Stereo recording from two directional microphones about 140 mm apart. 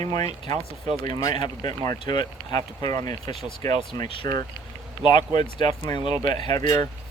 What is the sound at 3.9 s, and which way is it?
Speech, 40° left (ahead or behind).